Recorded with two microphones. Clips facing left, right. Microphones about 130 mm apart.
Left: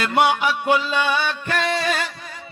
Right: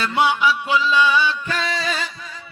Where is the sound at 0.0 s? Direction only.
50° left (ahead or behind).